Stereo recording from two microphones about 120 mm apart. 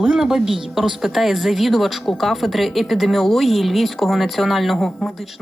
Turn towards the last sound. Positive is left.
turn(degrees=0)  # may be behind; listen again after turning